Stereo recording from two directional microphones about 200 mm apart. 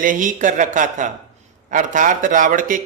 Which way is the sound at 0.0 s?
40° right (ahead or behind).